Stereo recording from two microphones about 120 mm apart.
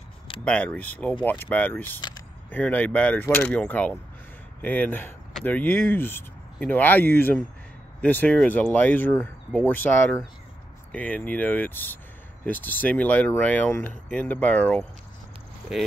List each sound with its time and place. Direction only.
0.5 s speech: 10° left (ahead or behind)
2.0 s a sound: 35° left (ahead or behind)
2.5 s speech: 15° left (ahead or behind)